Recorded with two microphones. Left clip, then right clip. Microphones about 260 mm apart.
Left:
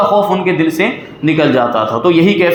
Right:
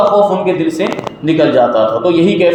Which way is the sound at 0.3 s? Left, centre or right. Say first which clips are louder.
Even; left.